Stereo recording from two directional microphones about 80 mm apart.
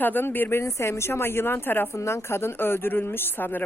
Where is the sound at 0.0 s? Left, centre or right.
Left.